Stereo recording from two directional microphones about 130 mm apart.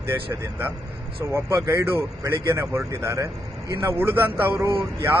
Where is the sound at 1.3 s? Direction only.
20° right (ahead or behind).